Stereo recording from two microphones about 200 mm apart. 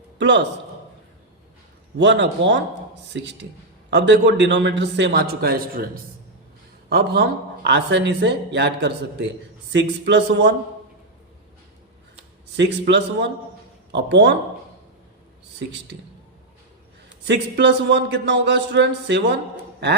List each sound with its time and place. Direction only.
0.2 s a man's voice: 60° right (ahead or behind)
2.0 s a man's voice: 60° right (ahead or behind)
12.5 s a man's voice: 60° right (ahead or behind)
17.2 s a man's voice: 60° right (ahead or behind)